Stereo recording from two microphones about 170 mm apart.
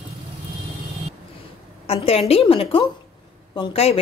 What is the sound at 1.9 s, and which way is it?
A woman's voice, 35° left (ahead or behind).